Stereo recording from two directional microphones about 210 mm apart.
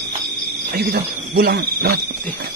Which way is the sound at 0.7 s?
50° right (ahead or behind).